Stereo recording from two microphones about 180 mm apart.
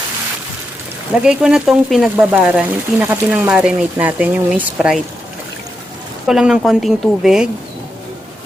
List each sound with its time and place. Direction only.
1.2 s speech: 5° right (ahead or behind)
6.2 s speech: 5° right (ahead or behind)